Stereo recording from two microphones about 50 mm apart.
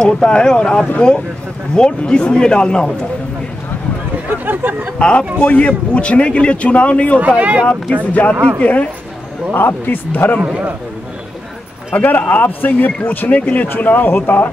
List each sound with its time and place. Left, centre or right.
0.0 s a man's voice: centre
4.3 s speech: right
4.9 s a man's voice: left
7.2 s speech: right
7.6 s a man's voice: left
9.5 s speech: left
11.9 s speech: left